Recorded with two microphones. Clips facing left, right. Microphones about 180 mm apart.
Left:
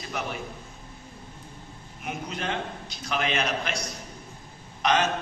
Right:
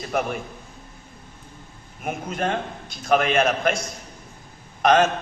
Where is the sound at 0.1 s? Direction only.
50° right (ahead or behind).